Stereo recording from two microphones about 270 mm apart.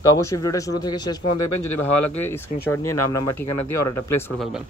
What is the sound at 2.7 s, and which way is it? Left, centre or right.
Speech, centre.